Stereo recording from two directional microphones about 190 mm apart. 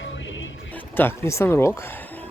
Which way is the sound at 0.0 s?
80° left.